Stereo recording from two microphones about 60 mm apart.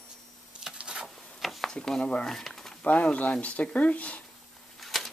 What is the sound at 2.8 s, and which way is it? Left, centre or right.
Speech, left.